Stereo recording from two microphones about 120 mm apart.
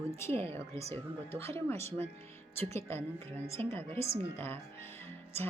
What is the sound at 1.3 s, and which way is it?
Speech, 20° left (ahead or behind).